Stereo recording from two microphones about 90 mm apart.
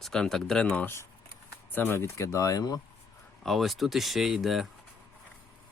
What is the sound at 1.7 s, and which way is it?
Speech, 25° left (ahead or behind).